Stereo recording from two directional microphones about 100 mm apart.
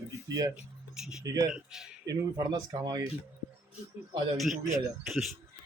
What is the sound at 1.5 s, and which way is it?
Speech, 5° right (ahead or behind).